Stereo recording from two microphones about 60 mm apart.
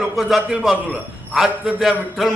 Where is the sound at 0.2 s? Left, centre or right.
Centre.